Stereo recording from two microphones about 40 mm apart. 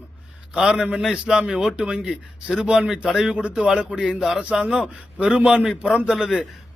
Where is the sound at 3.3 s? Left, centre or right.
Right.